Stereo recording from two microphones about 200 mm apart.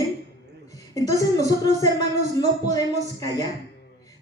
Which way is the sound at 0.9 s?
15° left (ahead or behind).